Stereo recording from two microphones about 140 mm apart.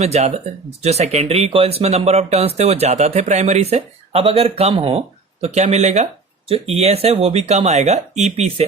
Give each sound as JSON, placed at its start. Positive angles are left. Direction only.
{"t": 0.0, "sound": "speech", "side_deg": -50}